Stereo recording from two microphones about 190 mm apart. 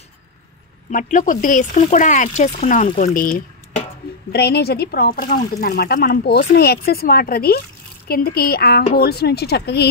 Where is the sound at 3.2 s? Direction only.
45° left (ahead or behind).